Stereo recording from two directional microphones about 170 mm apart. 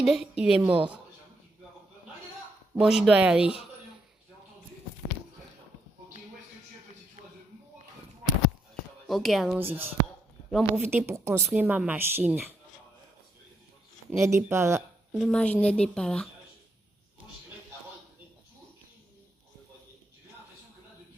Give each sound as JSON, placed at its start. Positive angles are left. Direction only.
{"t": 0.0, "sound": "speech", "side_deg": 0}
{"t": 2.7, "sound": "speech", "side_deg": -5}
{"t": 9.0, "sound": "speech", "side_deg": 0}
{"t": 9.6, "sound": "a woman's voice", "side_deg": -15}
{"t": 10.5, "sound": "speech", "side_deg": 0}
{"t": 10.9, "sound": "a woman's voice", "side_deg": -15}
{"t": 14.2, "sound": "a woman's voice", "side_deg": -15}
{"t": 15.1, "sound": "speech", "side_deg": 5}